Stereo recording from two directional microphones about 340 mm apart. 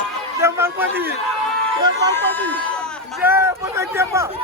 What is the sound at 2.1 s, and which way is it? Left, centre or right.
Speech, centre.